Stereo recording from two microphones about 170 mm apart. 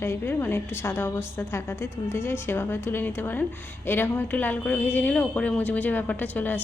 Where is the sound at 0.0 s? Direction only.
15° left (ahead or behind).